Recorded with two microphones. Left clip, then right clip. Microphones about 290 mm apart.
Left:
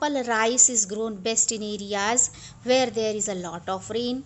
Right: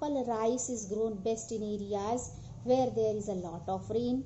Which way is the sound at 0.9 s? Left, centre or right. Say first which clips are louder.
Left 4 dB; left.